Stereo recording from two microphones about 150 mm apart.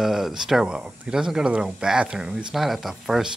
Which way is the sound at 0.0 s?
5° right (ahead or behind).